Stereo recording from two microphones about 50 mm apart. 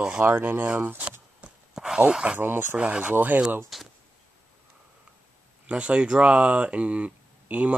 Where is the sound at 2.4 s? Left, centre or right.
Right.